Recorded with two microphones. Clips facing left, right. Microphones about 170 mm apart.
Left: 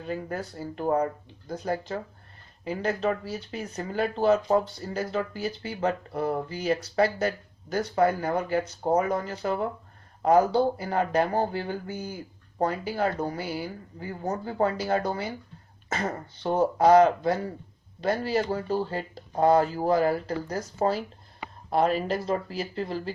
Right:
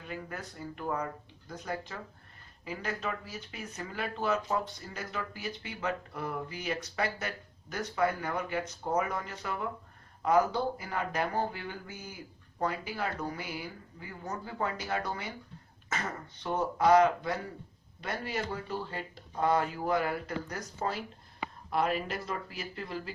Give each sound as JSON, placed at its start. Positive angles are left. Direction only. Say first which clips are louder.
{"t": 0.0, "sound": "speech", "louder": "left 8 dB", "side_deg": 35}